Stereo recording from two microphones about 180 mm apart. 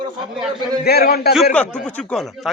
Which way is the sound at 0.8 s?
60° left (ahead or behind).